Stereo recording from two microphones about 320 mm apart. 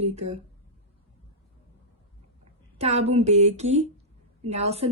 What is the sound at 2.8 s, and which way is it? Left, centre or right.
Speech, centre.